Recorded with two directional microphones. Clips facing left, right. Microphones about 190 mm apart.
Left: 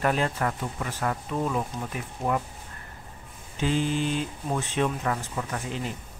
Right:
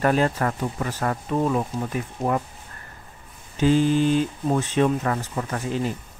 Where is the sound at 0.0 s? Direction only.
45° right (ahead or behind).